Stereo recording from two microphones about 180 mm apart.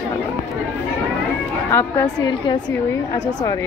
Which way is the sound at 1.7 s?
15° left (ahead or behind).